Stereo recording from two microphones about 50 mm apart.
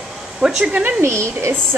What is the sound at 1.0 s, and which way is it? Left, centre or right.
Speech, right.